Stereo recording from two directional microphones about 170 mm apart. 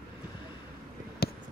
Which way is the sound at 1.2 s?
65° left (ahead or behind).